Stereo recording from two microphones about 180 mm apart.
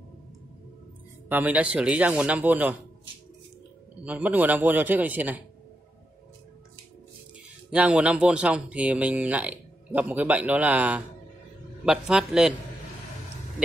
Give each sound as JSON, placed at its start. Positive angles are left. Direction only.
{"t": 1.3, "sound": "speech", "side_deg": -10}
{"t": 4.0, "sound": "speech", "side_deg": -10}
{"t": 7.7, "sound": "a man's voice", "side_deg": -5}